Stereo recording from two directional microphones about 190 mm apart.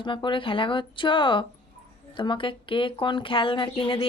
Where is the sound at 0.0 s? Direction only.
25° left (ahead or behind).